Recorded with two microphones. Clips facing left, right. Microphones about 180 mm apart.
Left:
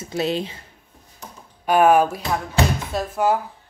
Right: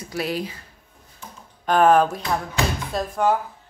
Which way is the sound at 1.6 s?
10° left (ahead or behind).